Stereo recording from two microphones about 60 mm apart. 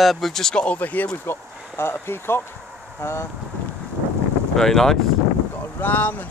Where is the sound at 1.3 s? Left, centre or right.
Left.